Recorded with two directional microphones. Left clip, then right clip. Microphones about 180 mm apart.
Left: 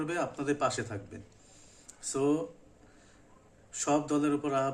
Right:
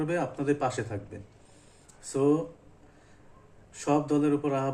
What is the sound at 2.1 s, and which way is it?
Speech, 15° left (ahead or behind).